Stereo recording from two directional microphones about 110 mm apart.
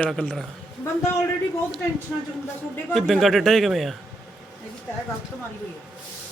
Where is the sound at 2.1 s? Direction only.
10° right (ahead or behind).